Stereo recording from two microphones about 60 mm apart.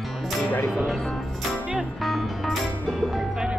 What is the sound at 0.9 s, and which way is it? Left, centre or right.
Speech, centre.